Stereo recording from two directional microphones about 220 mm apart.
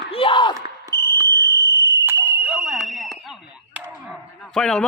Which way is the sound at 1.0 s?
20° right (ahead or behind).